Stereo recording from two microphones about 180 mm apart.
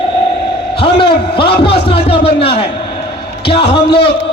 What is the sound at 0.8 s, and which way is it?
A man's voice, 30° left (ahead or behind).